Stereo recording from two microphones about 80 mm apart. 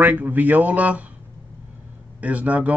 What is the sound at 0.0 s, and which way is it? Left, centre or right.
Speech, right.